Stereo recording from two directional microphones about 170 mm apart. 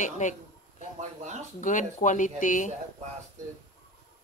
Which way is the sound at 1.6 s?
50° left (ahead or behind).